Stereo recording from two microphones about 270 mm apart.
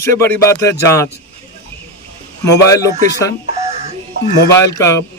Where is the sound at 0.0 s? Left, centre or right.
Centre.